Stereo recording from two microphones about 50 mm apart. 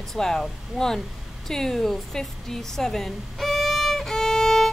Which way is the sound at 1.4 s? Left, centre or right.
Centre.